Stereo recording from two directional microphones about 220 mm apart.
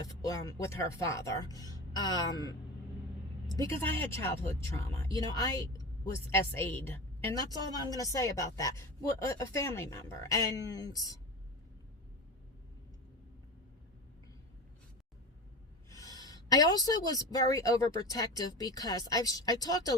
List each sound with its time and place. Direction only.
0.0 s a woman's voice: 15° left (ahead or behind)
4.1 s a woman's voice: 10° left (ahead or behind)
15.9 s a woman's voice: 15° left (ahead or behind)